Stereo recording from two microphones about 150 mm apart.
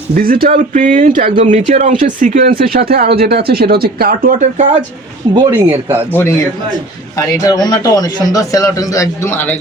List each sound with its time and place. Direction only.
0.1 s speech: 75° right (ahead or behind)
0.5 s speech: 55° right (ahead or behind); by 4.4 s 90° right
4.4 s speech: 50° right (ahead or behind)
5.3 s speech: 30° right (ahead or behind)
7.2 s a man's voice: 25° left (ahead or behind)